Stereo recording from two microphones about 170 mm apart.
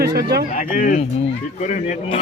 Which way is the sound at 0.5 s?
50° left (ahead or behind).